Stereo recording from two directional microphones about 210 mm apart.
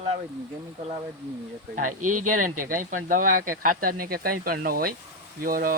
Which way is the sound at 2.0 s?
90° right.